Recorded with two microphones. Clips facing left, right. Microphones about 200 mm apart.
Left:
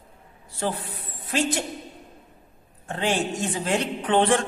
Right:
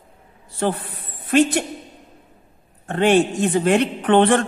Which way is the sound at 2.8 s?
60° right (ahead or behind).